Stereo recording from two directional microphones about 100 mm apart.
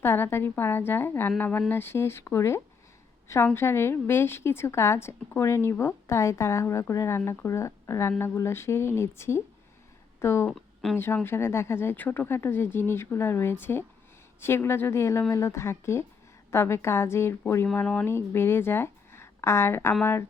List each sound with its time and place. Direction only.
0.0 s speech: 20° left (ahead or behind)
10.5 s a sound: centre (ahead or behind)
10.9 s speech: 20° left (ahead or behind)